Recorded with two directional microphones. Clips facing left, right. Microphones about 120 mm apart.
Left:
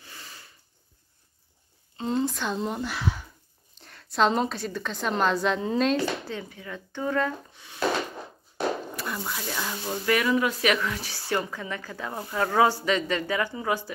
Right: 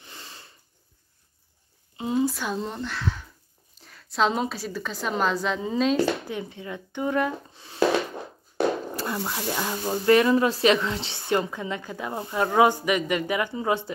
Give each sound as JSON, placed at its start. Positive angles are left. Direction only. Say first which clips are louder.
{"t": 0.0, "sound": "a sound", "louder": "right 1 dB", "side_deg": -25}
{"t": 2.0, "sound": "speech", "louder": "right 2 dB", "side_deg": -10}
{"t": 2.6, "sound": "speech", "louder": "left 1 dB", "side_deg": 10}
{"t": 3.8, "sound": "a woman's voice", "louder": "left 1 dB", "side_deg": 0}
{"t": 6.2, "sound": "speech", "louder": "right 3 dB", "side_deg": -20}
{"t": 7.5, "sound": "a sound", "louder": "right 7 dB", "side_deg": -30}
{"t": 9.3, "sound": "speech", "louder": "right 4 dB", "side_deg": -25}